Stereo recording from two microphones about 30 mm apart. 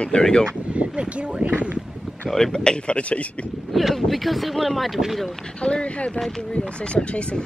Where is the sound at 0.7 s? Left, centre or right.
Right.